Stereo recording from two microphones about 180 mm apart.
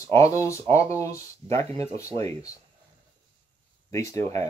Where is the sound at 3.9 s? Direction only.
15° left (ahead or behind).